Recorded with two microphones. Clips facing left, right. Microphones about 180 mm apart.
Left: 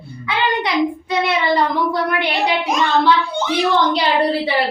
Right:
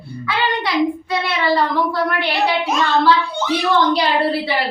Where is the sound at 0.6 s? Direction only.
20° left (ahead or behind).